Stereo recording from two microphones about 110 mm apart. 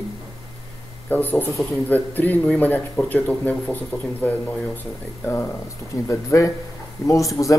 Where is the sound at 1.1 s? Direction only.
15° left (ahead or behind).